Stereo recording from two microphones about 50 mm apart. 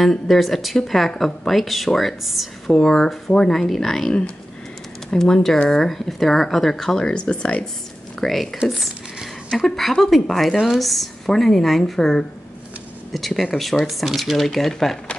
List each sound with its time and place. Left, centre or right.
0.0 s speech: centre
5.1 s speech: centre
7.1 s speech: centre
8.2 s speech: centre